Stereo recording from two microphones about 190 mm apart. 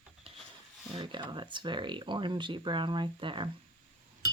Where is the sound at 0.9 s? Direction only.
25° right (ahead or behind).